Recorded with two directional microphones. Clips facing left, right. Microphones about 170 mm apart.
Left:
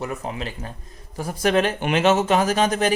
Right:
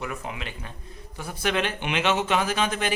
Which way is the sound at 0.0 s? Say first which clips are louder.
Left 5 dB; 35° left (ahead or behind).